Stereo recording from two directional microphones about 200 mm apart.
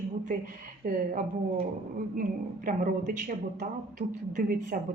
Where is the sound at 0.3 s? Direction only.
45° right (ahead or behind).